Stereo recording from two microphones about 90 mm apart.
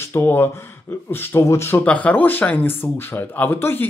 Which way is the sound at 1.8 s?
15° left (ahead or behind).